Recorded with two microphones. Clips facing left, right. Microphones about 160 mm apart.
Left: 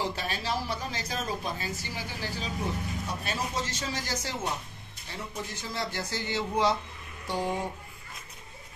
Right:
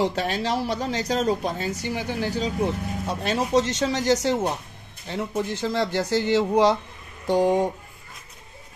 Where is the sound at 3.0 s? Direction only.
80° right.